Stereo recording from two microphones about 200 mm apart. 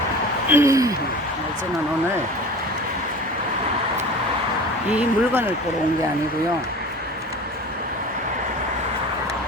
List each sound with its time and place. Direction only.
0.4 s speech: 15° right (ahead or behind)
4.9 s speech: 10° right (ahead or behind)